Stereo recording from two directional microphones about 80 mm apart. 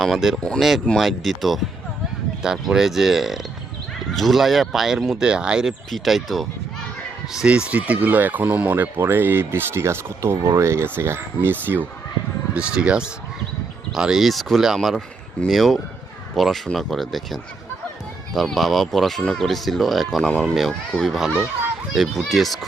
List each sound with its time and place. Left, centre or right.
0.0 s speech: centre
7.3 s speech: centre
12.5 s speech: centre